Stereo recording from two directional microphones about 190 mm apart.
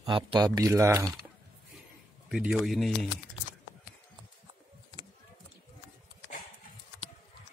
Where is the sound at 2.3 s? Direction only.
Centre (ahead or behind).